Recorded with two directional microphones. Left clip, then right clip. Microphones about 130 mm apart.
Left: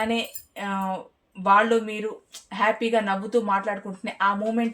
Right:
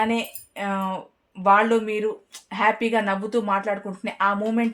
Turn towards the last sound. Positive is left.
turn(degrees=-50)  # may be behind; listen again after turning